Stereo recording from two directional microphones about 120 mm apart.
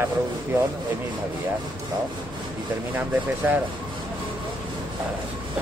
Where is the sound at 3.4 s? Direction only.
20° right (ahead or behind).